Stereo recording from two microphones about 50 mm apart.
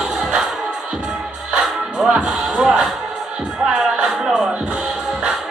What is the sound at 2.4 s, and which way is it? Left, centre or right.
Music, centre.